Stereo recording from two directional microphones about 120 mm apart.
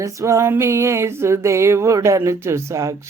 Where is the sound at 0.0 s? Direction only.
25° right (ahead or behind).